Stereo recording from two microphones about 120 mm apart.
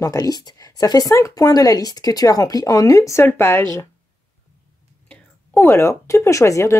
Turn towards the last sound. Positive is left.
turn(degrees=25)  # may be behind; listen again after turning